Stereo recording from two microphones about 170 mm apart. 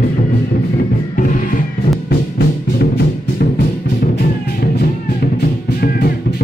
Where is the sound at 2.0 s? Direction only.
70° left (ahead or behind).